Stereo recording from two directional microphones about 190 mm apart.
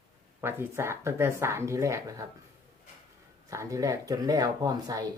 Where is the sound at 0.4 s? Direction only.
15° right (ahead or behind).